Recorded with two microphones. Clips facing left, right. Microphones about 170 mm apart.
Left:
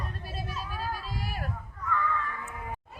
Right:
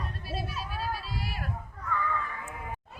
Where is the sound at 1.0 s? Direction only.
45° left (ahead or behind).